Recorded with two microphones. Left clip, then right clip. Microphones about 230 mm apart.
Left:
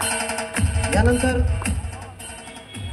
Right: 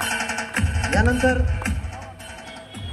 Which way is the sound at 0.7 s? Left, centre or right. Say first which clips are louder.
Left 2 dB; left.